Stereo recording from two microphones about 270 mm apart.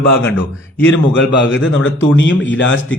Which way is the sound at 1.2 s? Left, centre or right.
Left.